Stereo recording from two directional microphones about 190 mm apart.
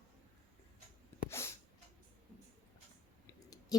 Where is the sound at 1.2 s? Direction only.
15° left (ahead or behind).